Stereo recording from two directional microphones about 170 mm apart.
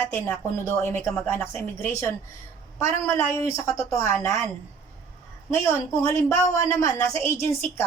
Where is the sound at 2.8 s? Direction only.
15° left (ahead or behind).